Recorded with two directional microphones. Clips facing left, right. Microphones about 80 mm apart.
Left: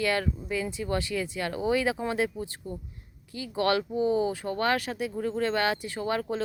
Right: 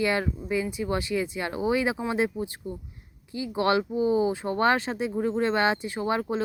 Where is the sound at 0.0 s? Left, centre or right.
Right.